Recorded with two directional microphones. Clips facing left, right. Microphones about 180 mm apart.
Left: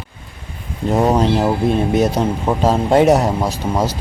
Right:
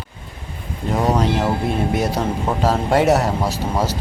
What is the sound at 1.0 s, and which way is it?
Speech, 25° left (ahead or behind).